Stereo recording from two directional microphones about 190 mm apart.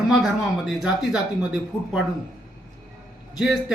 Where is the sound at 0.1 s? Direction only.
Centre (ahead or behind).